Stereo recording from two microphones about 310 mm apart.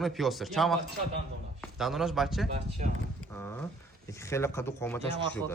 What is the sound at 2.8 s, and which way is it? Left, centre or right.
Speech, right.